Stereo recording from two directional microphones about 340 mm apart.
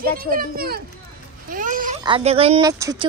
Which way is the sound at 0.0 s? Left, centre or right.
Right.